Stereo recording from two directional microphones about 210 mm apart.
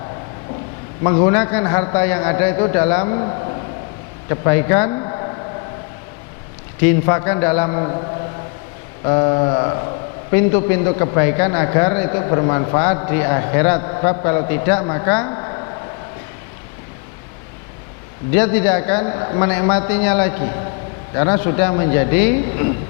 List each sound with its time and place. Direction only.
1.0 s a man's voice: 20° left (ahead or behind)
6.8 s a man's voice: 15° left (ahead or behind)
7.5 s a sound: 20° left (ahead or behind)
9.0 s a sound: 20° left (ahead or behind)
10.3 s a man's voice: 15° left (ahead or behind)
18.5 s a man's voice: 10° left (ahead or behind)